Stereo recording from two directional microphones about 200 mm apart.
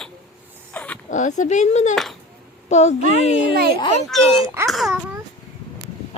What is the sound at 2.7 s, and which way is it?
Speech, 35° left (ahead or behind).